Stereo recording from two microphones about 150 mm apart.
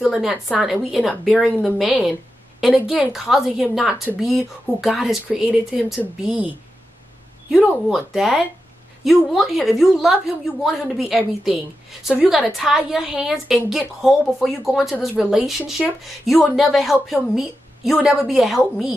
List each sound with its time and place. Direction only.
0.0 s a woman's voice: centre (ahead or behind)
7.5 s a woman's voice: centre (ahead or behind)